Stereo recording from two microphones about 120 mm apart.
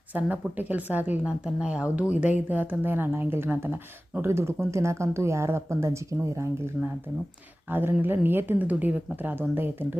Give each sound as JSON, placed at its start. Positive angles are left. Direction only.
{"t": 0.1, "sound": "a woman's voice", "side_deg": -15}